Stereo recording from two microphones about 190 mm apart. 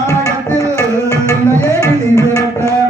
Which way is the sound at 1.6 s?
20° left (ahead or behind).